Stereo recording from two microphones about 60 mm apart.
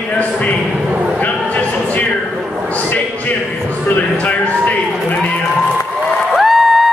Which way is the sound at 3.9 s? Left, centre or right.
Left.